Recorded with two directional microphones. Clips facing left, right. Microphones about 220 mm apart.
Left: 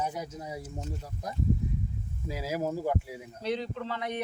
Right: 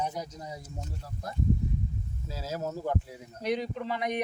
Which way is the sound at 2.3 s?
15° left (ahead or behind).